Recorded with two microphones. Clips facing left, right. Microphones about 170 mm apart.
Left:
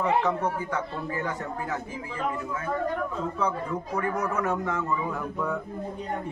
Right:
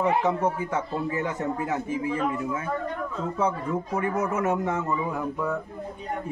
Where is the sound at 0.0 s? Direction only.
20° right (ahead or behind).